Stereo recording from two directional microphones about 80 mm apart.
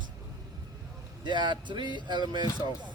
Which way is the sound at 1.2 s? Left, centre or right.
Right.